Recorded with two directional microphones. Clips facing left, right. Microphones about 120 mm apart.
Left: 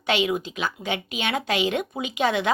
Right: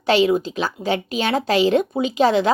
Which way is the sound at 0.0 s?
35° right (ahead or behind).